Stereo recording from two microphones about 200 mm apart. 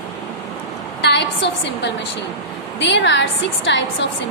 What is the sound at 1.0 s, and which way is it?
A woman's voice, 60° left (ahead or behind).